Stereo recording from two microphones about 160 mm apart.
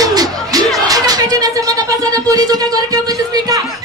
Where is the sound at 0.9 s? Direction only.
25° right (ahead or behind).